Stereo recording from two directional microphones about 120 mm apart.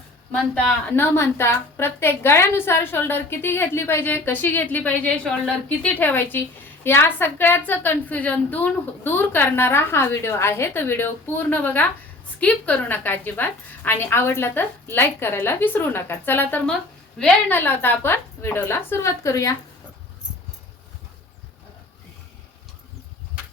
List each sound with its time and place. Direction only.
0.3 s a woman's voice: 15° left (ahead or behind)